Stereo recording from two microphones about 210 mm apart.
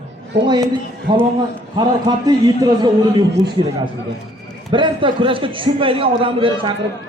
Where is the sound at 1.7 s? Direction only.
20° right (ahead or behind).